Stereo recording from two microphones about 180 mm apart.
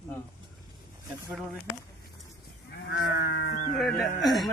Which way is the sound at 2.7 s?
75° left (ahead or behind).